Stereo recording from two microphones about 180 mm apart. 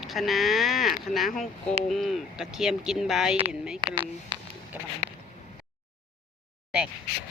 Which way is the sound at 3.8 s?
25° right (ahead or behind).